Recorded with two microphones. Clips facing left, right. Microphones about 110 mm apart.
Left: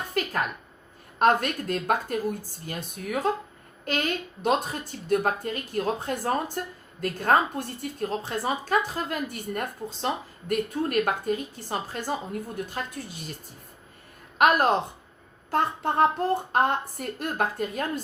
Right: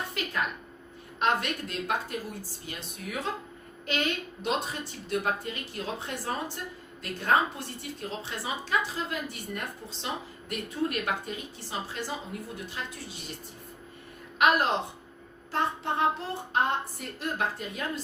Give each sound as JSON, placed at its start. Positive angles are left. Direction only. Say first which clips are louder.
{"t": 0.2, "sound": "a sound", "louder": "left 10 dB", "side_deg": 45}
{"t": 1.2, "sound": "a woman's voice", "louder": "left 6 dB", "side_deg": 45}
{"t": 14.3, "sound": "a woman's voice", "louder": "left 4 dB", "side_deg": 45}